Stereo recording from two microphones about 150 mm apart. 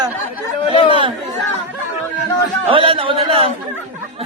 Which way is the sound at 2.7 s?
35° right (ahead or behind).